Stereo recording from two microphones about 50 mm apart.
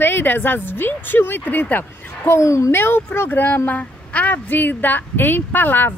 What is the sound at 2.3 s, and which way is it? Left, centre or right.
Speech, left.